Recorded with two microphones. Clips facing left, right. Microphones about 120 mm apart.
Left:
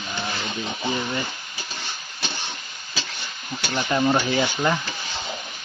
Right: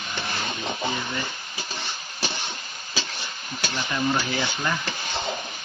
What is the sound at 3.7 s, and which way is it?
Speech, 40° left (ahead or behind).